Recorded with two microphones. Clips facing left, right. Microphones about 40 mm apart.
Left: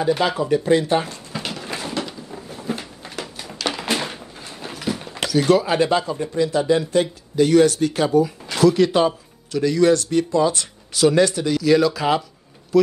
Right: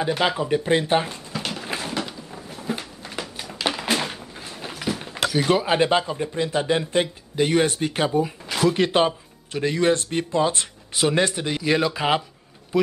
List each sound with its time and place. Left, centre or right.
0.4 s speech: right
1.3 s a sound: centre
3.7 s speech: centre; by 12.2 s right